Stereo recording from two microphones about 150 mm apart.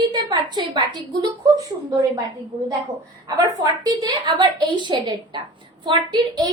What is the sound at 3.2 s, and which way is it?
A woman's voice, 25° right (ahead or behind).